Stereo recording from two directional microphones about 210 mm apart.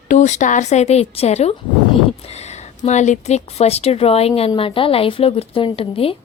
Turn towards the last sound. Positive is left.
turn(degrees=25)  # may be behind; listen again after turning